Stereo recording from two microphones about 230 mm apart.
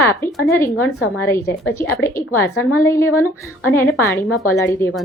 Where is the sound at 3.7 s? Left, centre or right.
Centre.